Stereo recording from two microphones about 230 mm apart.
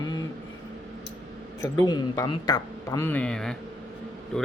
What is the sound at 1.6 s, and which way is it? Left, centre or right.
A man's voice, centre.